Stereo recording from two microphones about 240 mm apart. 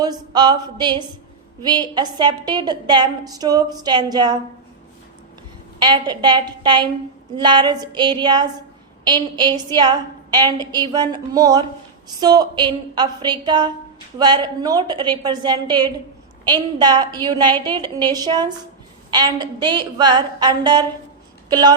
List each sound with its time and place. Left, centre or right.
0.0 s a woman's voice: centre
5.8 s a woman's voice: centre